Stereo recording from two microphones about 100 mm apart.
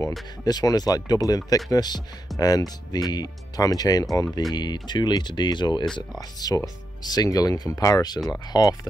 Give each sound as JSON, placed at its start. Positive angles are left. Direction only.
{"t": 0.5, "sound": "speech", "side_deg": 40}